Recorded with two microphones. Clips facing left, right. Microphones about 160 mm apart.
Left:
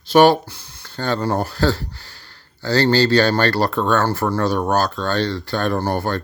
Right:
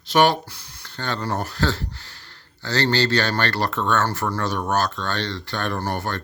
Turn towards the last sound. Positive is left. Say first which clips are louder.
# left 6 dB
turn(degrees=35)  # may be behind; listen again after turning